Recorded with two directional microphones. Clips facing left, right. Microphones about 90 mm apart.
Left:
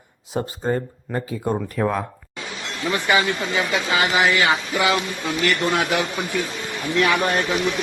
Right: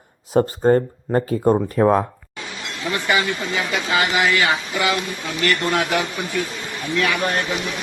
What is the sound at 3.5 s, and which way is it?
Speech, 25° left (ahead or behind).